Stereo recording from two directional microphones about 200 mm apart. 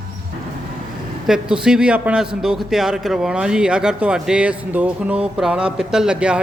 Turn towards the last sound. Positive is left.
turn(degrees=-5)  # may be behind; listen again after turning